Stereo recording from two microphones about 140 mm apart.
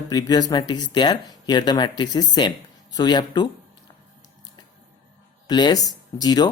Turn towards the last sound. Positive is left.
turn(degrees=30)  # may be behind; listen again after turning